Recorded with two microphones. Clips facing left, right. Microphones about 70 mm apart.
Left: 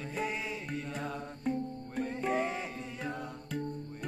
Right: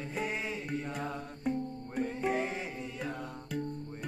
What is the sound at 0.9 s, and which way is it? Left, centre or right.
Music, centre.